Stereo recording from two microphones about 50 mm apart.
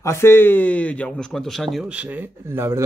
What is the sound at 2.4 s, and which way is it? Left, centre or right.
Speech, right.